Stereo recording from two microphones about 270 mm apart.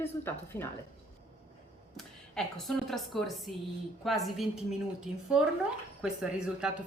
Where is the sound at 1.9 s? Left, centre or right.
Centre.